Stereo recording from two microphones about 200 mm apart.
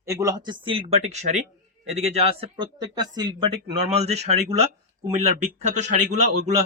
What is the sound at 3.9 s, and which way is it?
Speech, 35° right (ahead or behind).